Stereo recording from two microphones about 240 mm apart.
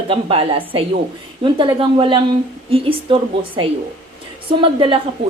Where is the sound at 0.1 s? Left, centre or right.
Right.